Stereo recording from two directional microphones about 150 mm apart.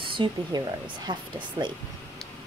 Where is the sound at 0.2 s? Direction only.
25° right (ahead or behind).